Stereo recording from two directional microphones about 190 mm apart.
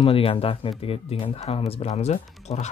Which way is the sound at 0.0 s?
30° left (ahead or behind).